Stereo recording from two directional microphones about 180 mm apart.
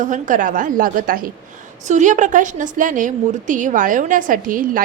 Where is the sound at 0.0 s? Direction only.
45° right (ahead or behind).